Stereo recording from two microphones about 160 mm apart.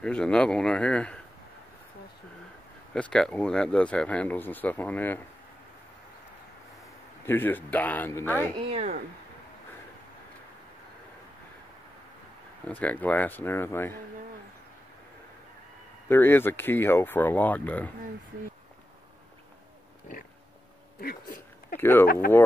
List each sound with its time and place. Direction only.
0.0 s speech: 5° left (ahead or behind)
2.9 s speech: 5° left (ahead or behind)
7.2 s speech: 10° left (ahead or behind)
8.5 s speech: 40° right (ahead or behind)
12.6 s speech: 10° left (ahead or behind)
16.1 s speech: 15° left (ahead or behind)
21.0 s a sound: 65° left (ahead or behind)
21.7 s speech: 15° left (ahead or behind)
22.0 s speech: 70° left (ahead or behind)